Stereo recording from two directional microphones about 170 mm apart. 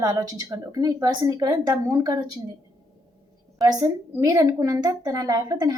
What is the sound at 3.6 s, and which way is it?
A woman's voice, 20° right (ahead or behind).